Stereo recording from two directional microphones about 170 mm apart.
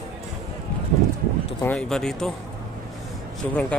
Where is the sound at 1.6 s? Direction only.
5° left (ahead or behind).